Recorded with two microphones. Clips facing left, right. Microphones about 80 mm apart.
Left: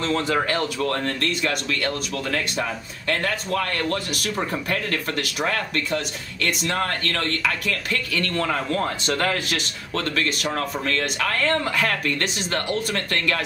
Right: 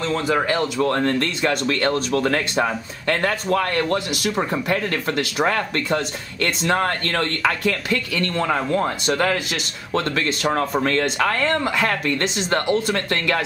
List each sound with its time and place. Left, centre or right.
0.0 s speech: centre
0.9 s speech: right
10.0 s speech: right